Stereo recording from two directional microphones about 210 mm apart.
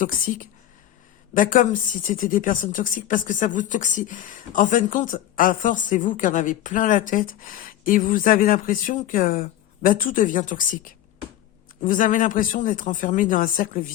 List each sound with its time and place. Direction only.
0.3 s a woman's voice: 40° left (ahead or behind)
11.8 s a woman's voice: 40° left (ahead or behind)